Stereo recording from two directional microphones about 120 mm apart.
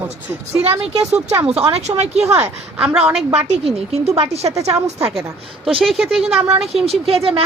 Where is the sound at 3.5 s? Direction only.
60° right (ahead or behind).